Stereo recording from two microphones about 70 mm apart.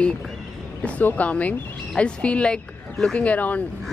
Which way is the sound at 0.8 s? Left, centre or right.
Left.